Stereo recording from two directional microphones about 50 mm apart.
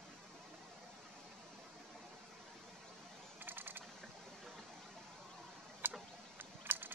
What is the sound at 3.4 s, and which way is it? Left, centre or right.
Typing, right.